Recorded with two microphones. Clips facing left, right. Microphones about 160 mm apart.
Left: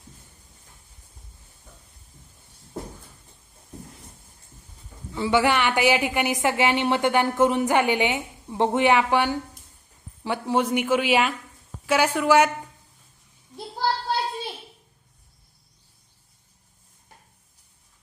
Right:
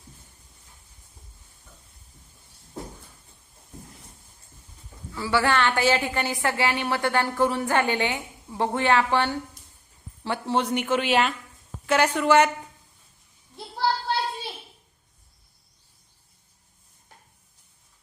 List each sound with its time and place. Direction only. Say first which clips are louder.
5.1 s a woman's voice: left 2 dB; 20° left (ahead or behind)